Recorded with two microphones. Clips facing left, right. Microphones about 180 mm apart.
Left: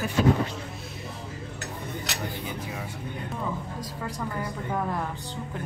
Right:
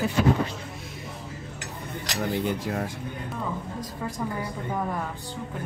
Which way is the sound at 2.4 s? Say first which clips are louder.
Right 7 dB; 65° right (ahead or behind).